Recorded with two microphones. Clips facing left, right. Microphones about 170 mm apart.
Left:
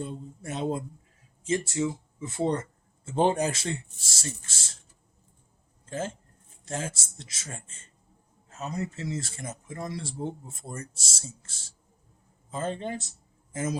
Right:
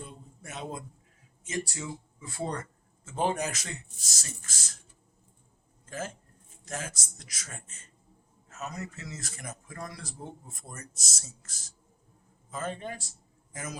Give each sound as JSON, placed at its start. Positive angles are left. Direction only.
{"t": 0.0, "sound": "speech", "side_deg": 30}
{"t": 5.8, "sound": "a sound", "side_deg": 30}
{"t": 6.7, "sound": "a man's voice", "side_deg": 30}